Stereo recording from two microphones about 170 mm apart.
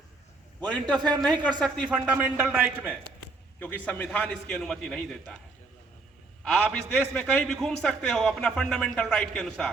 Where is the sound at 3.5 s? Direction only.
10° left (ahead or behind).